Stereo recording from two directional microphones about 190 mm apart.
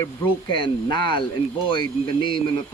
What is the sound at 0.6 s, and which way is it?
Speech, 25° left (ahead or behind).